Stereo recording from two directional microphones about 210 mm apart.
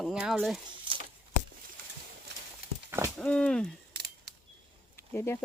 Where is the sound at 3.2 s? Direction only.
5° left (ahead or behind).